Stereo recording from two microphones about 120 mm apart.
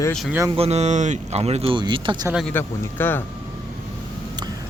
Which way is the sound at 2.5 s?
15° left (ahead or behind).